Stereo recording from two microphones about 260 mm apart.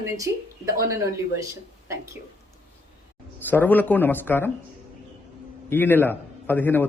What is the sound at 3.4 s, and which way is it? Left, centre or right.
A man's voice, centre.